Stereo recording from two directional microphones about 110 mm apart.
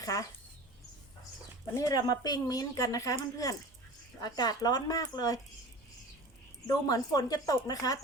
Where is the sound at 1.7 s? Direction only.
35° left (ahead or behind).